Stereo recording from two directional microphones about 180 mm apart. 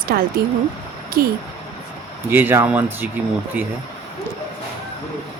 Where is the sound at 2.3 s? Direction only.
10° right (ahead or behind).